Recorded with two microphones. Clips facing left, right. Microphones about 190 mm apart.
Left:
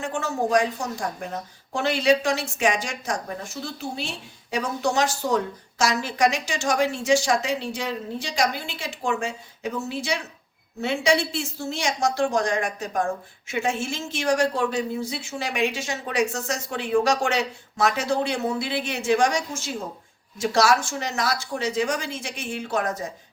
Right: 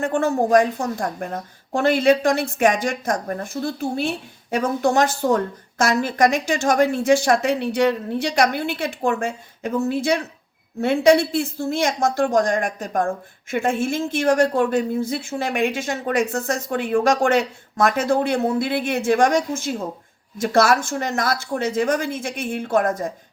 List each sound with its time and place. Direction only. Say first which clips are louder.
0.0 s a woman's voice: right 6 dB; 55° right (ahead or behind)